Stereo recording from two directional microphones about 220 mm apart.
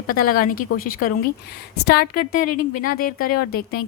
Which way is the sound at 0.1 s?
40° left (ahead or behind).